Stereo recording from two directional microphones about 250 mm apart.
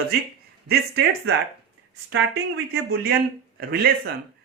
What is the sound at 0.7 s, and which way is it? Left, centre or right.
A man's voice, right.